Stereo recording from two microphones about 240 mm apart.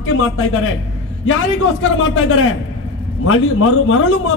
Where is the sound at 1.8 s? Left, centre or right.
Left.